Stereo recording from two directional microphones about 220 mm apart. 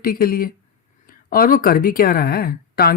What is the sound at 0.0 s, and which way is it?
Speech, 40° left (ahead or behind).